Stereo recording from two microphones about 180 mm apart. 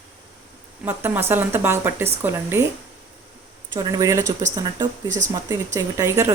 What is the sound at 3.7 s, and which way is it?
Speech, 20° right (ahead or behind).